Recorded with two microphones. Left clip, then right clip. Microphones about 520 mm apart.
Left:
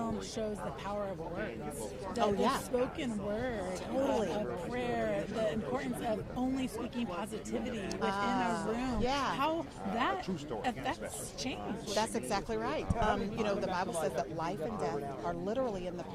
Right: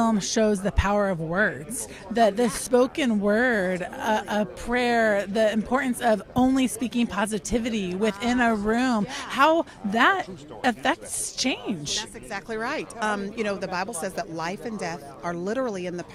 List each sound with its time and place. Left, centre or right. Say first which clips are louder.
0.0 s speech: right 15 dB; right
2.6 s speech: right 13 dB; right
12.5 s speech: right 6 dB; right